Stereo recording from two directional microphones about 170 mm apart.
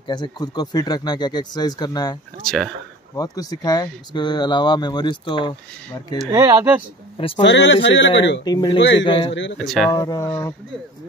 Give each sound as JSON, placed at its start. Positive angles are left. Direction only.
{"t": 0.0, "sound": "speech", "side_deg": 25}
{"t": 2.4, "sound": "speech", "side_deg": 0}
{"t": 3.2, "sound": "speech", "side_deg": 20}
{"t": 6.3, "sound": "speech", "side_deg": -20}
{"t": 7.2, "sound": "speech", "side_deg": 30}
{"t": 7.4, "sound": "speech", "side_deg": 90}
{"t": 8.5, "sound": "speech", "side_deg": 25}
{"t": 8.7, "sound": "speech", "side_deg": 90}
{"t": 9.0, "sound": "speech", "side_deg": 30}
{"t": 9.3, "sound": "speech", "side_deg": 90}
{"t": 9.8, "sound": "speech", "side_deg": 20}